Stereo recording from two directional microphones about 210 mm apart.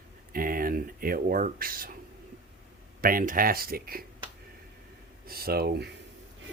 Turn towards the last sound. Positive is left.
turn(degrees=-50)  # may be behind; listen again after turning